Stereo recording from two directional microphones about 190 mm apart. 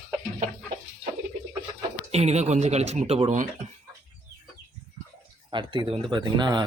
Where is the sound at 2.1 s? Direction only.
35° right (ahead or behind).